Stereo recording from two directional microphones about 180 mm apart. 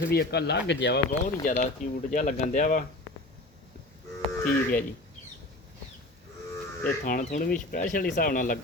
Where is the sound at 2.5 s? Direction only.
45° left (ahead or behind).